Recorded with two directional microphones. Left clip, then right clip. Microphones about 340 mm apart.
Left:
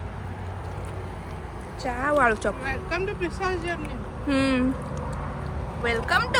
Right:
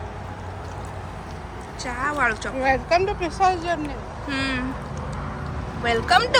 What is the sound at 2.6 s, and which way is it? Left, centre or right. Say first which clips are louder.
Speech: right 9 dB; centre.